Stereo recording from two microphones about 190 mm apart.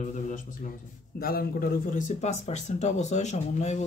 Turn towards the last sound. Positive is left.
turn(degrees=35)  # may be behind; listen again after turning